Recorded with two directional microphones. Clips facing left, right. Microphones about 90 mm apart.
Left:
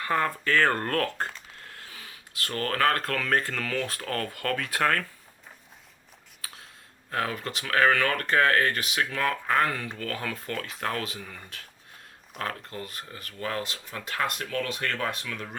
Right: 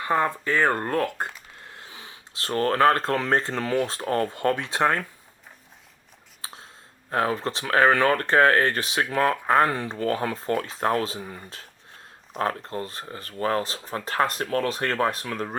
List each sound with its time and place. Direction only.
0.0 s speech: 20° right (ahead or behind)
6.4 s a sound: 30° right (ahead or behind)
7.1 s speech: 30° right (ahead or behind)